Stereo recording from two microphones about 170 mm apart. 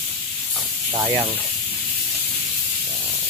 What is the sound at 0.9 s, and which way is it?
Speech, 25° right (ahead or behind).